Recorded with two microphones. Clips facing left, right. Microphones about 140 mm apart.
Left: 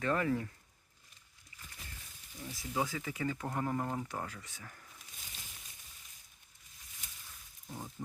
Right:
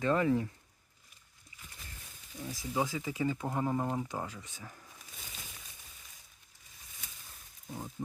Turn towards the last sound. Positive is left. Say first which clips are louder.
# right 3 dB
turn(degrees=-5)  # may be behind; listen again after turning